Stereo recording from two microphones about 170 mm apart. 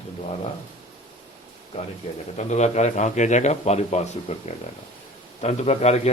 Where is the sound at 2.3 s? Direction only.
40° left (ahead or behind).